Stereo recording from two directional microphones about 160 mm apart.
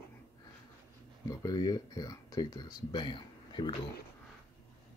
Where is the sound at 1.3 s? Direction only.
25° left (ahead or behind).